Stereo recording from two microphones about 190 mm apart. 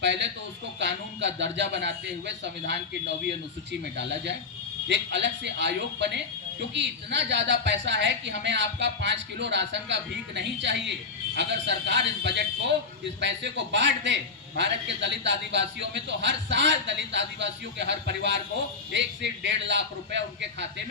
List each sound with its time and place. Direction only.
0.8 s a man's voice: 70° right (ahead or behind)